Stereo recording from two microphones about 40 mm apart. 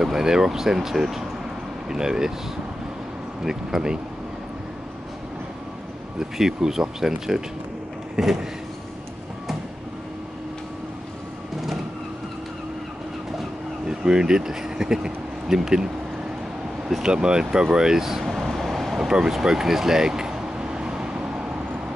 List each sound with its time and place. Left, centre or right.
0.0 s speech: centre
3.4 s speech: centre
6.1 s speech: centre
13.8 s speech: centre
17.0 s speech: right
18.2 s vehicle: centre
19.0 s vehicle: centre